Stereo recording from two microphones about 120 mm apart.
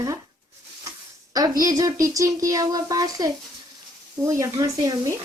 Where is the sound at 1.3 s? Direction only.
30° right (ahead or behind).